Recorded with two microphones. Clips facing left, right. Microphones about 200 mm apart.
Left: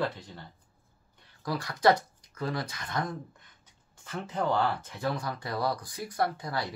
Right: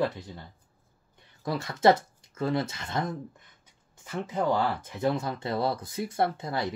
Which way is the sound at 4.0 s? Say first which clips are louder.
Right 3 dB; 10° right (ahead or behind).